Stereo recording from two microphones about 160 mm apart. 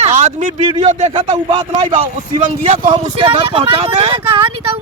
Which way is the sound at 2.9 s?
30° right (ahead or behind).